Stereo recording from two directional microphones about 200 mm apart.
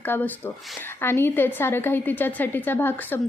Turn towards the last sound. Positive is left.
turn(degrees=10)  # may be behind; listen again after turning